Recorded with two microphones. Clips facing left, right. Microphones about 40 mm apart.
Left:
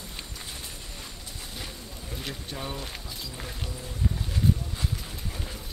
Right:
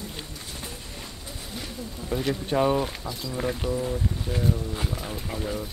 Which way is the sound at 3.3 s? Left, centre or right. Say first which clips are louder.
Right 16 dB; centre.